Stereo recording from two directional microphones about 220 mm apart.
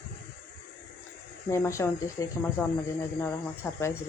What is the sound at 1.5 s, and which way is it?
Speech, 10° left (ahead or behind).